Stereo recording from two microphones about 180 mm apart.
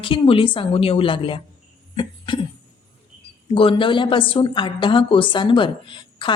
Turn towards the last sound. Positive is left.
turn(degrees=25)  # may be behind; listen again after turning